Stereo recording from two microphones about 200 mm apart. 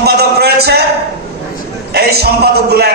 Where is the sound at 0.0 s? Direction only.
55° right (ahead or behind).